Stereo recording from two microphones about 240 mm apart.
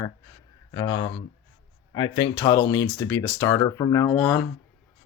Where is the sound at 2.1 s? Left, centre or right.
Centre.